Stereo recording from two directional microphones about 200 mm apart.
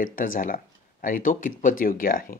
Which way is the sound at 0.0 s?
40° left (ahead or behind).